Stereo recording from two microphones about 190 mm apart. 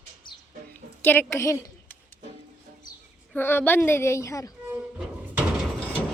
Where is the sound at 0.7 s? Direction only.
10° left (ahead or behind).